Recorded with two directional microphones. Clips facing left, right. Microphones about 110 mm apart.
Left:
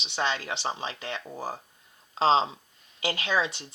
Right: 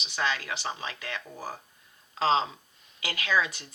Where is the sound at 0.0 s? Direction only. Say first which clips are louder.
Left 1 dB; 25° left (ahead or behind).